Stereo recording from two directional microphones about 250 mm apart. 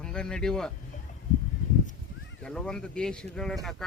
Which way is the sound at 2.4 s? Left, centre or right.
Centre.